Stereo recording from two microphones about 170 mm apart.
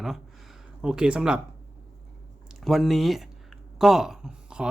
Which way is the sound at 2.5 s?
Centre (ahead or behind).